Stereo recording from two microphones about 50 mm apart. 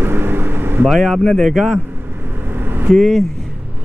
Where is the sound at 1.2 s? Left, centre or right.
Centre.